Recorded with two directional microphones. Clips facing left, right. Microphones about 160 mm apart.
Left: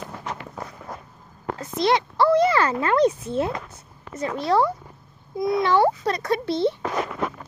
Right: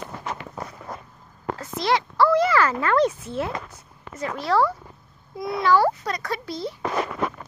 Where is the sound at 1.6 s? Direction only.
20° left (ahead or behind).